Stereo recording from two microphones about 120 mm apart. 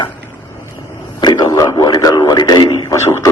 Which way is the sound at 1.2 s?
35° left (ahead or behind).